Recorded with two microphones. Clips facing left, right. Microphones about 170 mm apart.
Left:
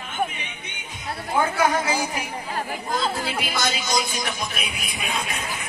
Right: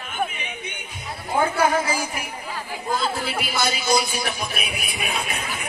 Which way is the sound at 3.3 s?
10° right (ahead or behind).